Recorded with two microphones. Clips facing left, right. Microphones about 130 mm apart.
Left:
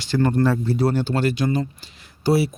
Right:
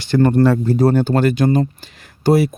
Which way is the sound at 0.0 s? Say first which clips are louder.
Right 6 dB; 55° right (ahead or behind).